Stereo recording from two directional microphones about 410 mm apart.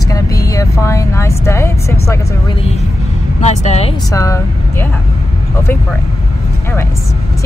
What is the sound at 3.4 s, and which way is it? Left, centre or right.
Speech, centre.